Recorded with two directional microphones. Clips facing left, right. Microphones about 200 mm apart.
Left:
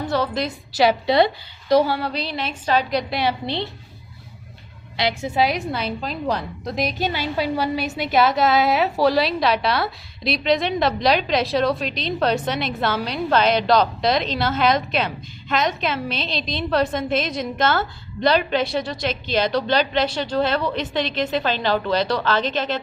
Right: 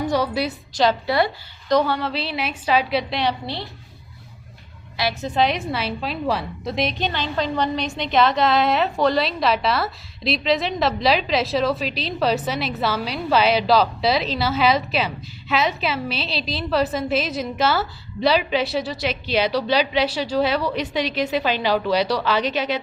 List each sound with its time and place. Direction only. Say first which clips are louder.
0.0 s a woman's voice: right 1 dB; 15° right (ahead or behind)
0.7 s a woman's voice: left 2 dB; 10° left (ahead or behind)
1.0 s a woman's voice: left 3 dB; 20° left (ahead or behind)
1.7 s a woman's voice: left 2 dB; centre (ahead or behind)
3.4 s a woman's voice: left 4 dB; 20° left (ahead or behind)
5.2 s a woman's voice: right 1 dB; 5° left (ahead or behind)